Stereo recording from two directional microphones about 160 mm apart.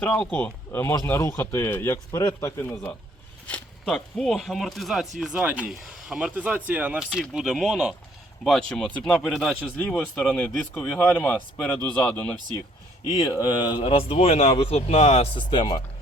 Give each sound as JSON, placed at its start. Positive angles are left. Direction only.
{"t": 0.0, "sound": "speech", "side_deg": 5}
{"t": 9.0, "sound": "speech", "side_deg": 5}
{"t": 13.4, "sound": "a man's voice", "side_deg": 25}